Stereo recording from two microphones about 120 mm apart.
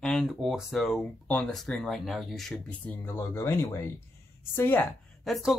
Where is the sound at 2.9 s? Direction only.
20° left (ahead or behind).